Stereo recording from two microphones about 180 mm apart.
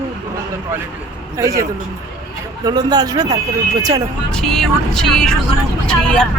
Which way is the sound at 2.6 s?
20° right (ahead or behind).